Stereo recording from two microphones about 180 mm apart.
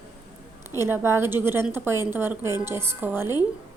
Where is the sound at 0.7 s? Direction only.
15° right (ahead or behind).